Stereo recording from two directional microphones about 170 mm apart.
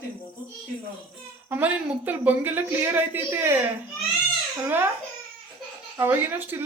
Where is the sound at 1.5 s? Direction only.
10° right (ahead or behind).